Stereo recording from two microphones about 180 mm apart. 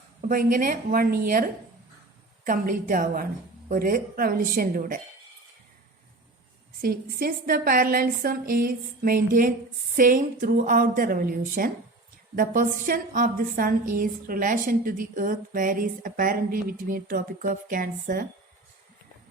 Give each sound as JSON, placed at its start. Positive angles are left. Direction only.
{"t": 0.2, "sound": "a woman's voice", "side_deg": -50}
{"t": 6.8, "sound": "a woman's voice", "side_deg": -55}